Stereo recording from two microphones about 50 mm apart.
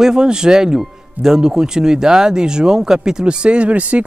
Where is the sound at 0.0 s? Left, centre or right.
Centre.